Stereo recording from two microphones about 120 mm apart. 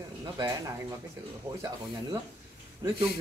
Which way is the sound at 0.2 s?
30° right (ahead or behind).